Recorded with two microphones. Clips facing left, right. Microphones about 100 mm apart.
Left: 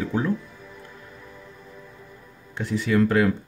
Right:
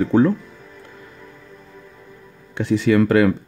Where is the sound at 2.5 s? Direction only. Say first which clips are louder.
Right 6 dB; 75° right (ahead or behind).